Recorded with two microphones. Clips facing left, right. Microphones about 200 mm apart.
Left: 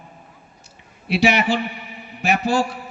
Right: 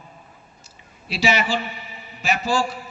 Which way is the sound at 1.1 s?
60° left (ahead or behind).